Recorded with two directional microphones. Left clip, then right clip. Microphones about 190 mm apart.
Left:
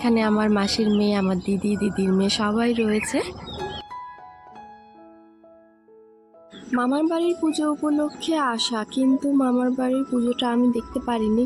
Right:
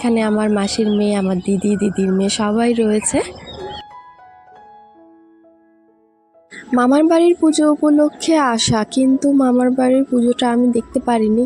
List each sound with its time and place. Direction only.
0.0 s speech: 15° right (ahead or behind)
6.7 s speech: 35° right (ahead or behind)